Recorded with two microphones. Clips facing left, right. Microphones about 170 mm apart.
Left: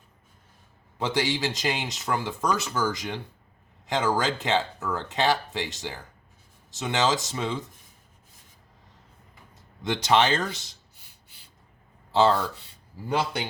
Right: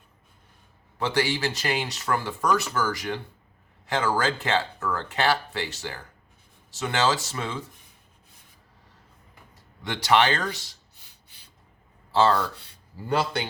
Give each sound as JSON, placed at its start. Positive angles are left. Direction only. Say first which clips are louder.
{"t": 0.9, "sound": "speech", "louder": "right 1 dB", "side_deg": 15}
{"t": 9.8, "sound": "speech", "louder": "even", "side_deg": 20}
{"t": 12.1, "sound": "speech", "louder": "even", "side_deg": 20}